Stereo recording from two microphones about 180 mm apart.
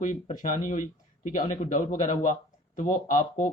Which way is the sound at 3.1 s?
45° left (ahead or behind).